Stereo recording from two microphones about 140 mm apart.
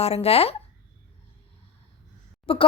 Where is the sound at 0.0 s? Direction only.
45° left (ahead or behind).